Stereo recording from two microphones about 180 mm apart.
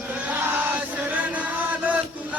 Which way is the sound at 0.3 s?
10° right (ahead or behind).